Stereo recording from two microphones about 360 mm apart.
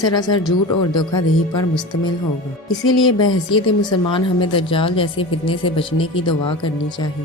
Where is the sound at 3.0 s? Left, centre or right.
Left.